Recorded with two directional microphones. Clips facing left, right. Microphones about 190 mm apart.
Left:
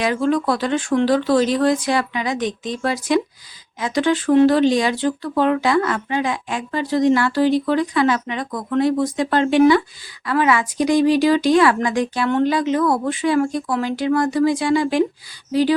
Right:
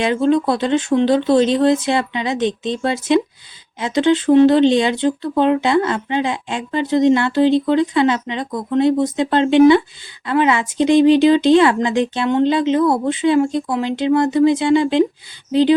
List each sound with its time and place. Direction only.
0.0 s speech: 25° right (ahead or behind)